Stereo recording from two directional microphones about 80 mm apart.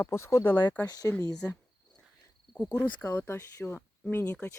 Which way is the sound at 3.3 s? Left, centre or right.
Left.